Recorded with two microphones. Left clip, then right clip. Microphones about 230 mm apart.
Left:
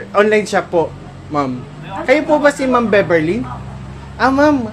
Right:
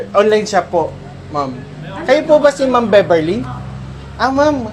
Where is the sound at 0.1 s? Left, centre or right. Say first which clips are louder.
Right 1 dB; left.